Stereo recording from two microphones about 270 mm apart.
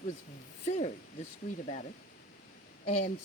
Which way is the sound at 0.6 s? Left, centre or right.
Left.